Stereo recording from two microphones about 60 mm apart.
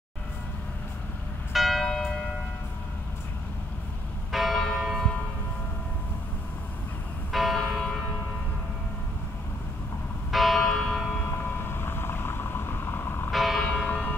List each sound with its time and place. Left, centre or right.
1.5 s church bell: centre
4.3 s church bell: centre
7.3 s church bell: centre
10.3 s church bell: centre
11.3 s vehicle: left
13.3 s church bell: centre
13.7 s a sound: left